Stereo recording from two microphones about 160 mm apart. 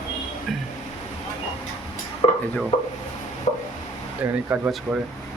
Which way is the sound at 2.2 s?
30° left (ahead or behind).